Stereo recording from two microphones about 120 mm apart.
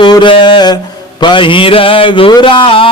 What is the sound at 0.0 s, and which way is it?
Mantra, 40° left (ahead or behind).